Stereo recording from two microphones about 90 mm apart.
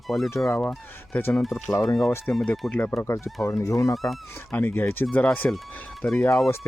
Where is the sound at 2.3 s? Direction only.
20° left (ahead or behind).